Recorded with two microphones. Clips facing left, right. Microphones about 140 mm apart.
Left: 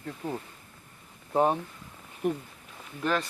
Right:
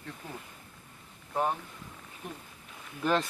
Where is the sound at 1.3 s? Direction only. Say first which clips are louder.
Left 6 dB; 25° left (ahead or behind).